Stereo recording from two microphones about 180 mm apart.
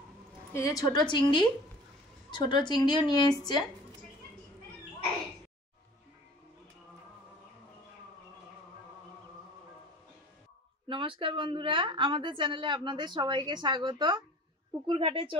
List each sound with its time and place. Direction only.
0.5 s a woman's voice: 15° left (ahead or behind)
10.9 s a woman's voice: 30° right (ahead or behind)